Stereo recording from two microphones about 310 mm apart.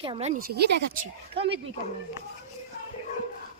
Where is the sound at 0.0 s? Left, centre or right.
Centre.